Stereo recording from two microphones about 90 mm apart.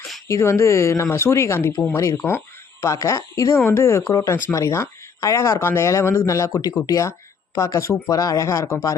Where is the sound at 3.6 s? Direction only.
25° left (ahead or behind).